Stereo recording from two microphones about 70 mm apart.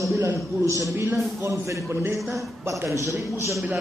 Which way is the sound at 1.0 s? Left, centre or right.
Right.